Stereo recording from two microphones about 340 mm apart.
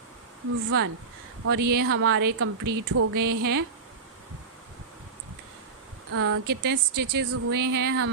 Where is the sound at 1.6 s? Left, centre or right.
Right.